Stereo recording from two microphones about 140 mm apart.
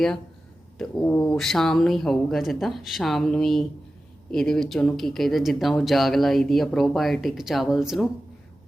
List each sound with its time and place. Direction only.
0.8 s speech: 15° left (ahead or behind)
1.4 s speech: centre (ahead or behind)